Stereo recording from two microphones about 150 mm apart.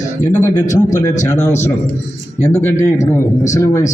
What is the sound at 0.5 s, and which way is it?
Speech, 55° left (ahead or behind).